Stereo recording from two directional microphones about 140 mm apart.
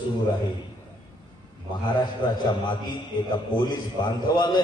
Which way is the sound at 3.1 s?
35° left (ahead or behind).